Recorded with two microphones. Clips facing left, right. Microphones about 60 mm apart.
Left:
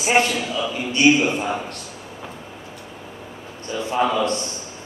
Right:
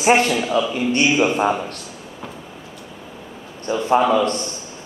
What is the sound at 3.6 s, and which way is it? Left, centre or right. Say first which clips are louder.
Speech: right 8 dB; right.